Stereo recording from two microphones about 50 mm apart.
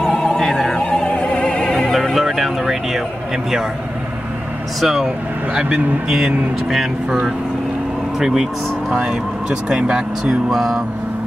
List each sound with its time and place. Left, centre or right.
0.0 s opera: centre
1.0 s opera: left
2.1 s a sound: centre
4.7 s speech: centre
6.7 s speech: centre
8.2 s speech: centre
10.5 s speech: centre